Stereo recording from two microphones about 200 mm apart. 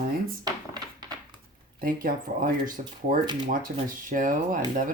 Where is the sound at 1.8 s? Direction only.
45° right (ahead or behind).